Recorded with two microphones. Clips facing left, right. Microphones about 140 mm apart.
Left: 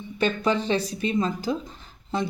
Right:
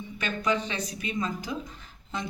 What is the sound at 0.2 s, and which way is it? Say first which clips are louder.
Speech: left 5 dB; 30° left (ahead or behind).